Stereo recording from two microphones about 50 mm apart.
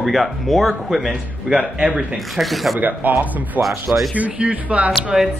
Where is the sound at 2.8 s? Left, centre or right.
Right.